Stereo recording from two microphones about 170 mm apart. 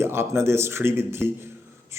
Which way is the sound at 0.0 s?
15° right (ahead or behind).